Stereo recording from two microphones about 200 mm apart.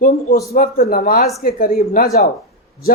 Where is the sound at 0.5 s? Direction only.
50° left (ahead or behind).